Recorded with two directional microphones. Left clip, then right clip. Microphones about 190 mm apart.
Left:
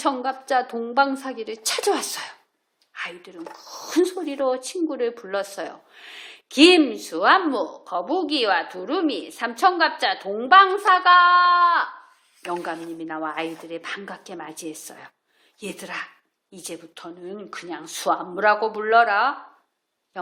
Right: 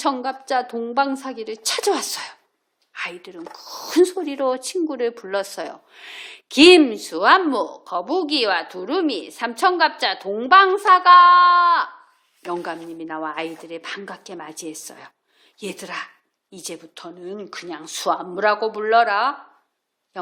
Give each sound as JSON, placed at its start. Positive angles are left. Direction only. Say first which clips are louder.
{"t": 0.0, "sound": "speech", "louder": "right 1 dB", "side_deg": -30}